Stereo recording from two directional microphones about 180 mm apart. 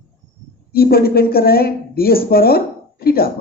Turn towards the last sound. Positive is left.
turn(degrees=60)  # may be behind; listen again after turning